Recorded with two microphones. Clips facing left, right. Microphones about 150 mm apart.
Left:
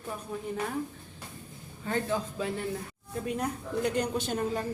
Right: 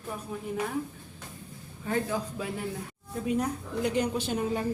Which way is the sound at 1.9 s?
5° right (ahead or behind).